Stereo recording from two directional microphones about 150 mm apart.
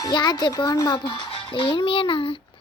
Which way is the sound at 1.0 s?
35° left (ahead or behind).